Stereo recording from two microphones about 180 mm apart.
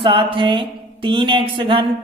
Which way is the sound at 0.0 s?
30° right (ahead or behind).